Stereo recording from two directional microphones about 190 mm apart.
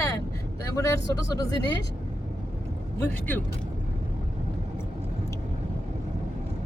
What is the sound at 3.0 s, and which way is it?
Speech, 10° left (ahead or behind).